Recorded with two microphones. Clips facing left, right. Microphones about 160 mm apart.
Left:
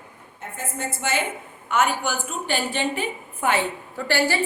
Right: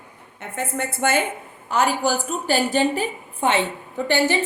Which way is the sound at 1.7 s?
35° right (ahead or behind).